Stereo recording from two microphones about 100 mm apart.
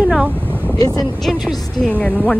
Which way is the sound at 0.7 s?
35° left (ahead or behind).